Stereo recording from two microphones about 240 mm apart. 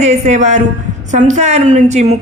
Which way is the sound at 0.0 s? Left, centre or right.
Right.